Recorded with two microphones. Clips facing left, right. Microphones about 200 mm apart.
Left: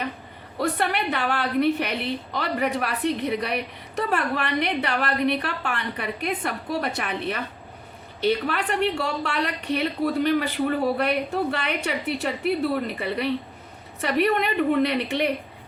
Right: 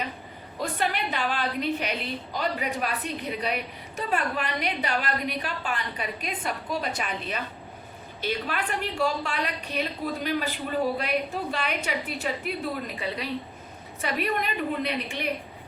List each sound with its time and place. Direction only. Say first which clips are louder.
0.6 s a woman's voice: left 4 dB; 65° left (ahead or behind)